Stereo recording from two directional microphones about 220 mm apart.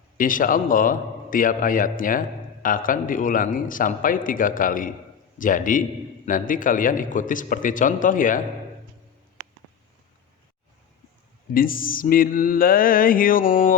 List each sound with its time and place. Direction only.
0.2 s a man's voice: 40° left (ahead or behind)
11.5 s a man's voice: 40° left (ahead or behind)